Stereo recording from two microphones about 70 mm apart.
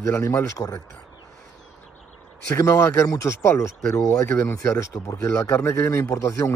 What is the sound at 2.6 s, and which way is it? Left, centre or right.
Speech, left.